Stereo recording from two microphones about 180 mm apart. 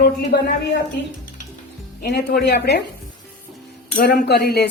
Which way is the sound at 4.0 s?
60° left (ahead or behind).